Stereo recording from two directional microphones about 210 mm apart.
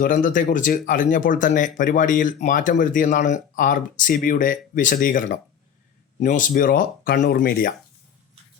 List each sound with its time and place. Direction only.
0.0 s speech: 40° left (ahead or behind)